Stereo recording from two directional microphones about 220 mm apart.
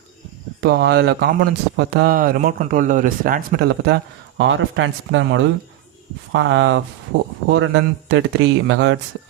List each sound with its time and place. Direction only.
0.6 s speech: 50° right (ahead or behind)